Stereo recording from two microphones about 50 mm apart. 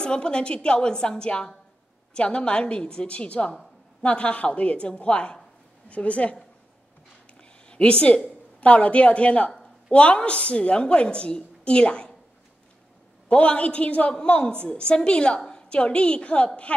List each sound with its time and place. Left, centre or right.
0.0 s a woman's voice: centre
7.3 s a sound: left
8.5 s a woman's voice: left
13.3 s a woman's voice: left